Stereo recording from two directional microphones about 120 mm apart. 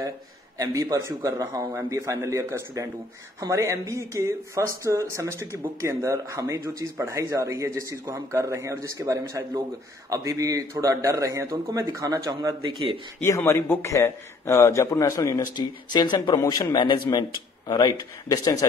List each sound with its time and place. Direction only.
0.6 s speech: 25° right (ahead or behind)
12.6 s speech: 45° right (ahead or behind)
13.2 s a man's voice: 20° left (ahead or behind)
15.5 s a man's voice: 35° left (ahead or behind)